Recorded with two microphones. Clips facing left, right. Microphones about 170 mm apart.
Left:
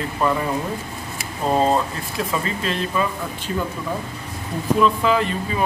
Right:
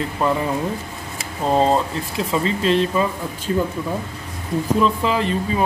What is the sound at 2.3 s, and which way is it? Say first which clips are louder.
Speech: right 8 dB; 25° right (ahead or behind).